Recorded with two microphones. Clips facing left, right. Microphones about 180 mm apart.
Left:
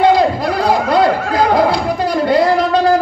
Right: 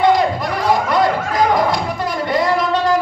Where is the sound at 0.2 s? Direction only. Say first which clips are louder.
Left 4 dB; 35° left (ahead or behind).